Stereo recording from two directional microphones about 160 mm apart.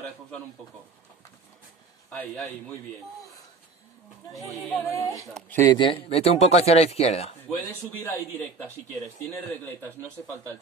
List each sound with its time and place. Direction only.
2.0 s a man's voice: 5° left (ahead or behind)
4.5 s a man's voice: centre (ahead or behind)
4.8 s speech: 20° left (ahead or behind)
5.7 s speech: 35° left (ahead or behind)
8.0 s speech: 10° left (ahead or behind)